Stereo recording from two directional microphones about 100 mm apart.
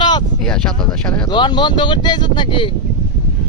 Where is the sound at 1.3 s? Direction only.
50° left (ahead or behind).